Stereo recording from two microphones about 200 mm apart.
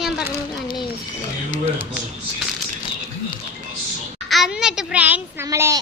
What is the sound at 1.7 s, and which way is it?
Speech, 10° right (ahead or behind).